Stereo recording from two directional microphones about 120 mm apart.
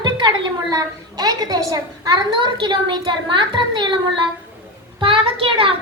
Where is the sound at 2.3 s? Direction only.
40° right (ahead or behind).